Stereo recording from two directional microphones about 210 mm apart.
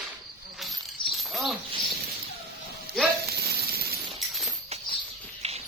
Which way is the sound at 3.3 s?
50° right (ahead or behind).